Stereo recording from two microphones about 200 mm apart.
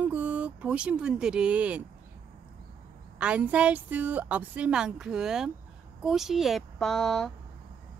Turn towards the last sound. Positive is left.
turn(degrees=0)  # may be behind; listen again after turning